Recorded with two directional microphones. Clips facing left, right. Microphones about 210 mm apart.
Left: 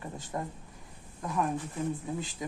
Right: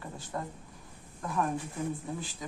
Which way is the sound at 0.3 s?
20° left (ahead or behind).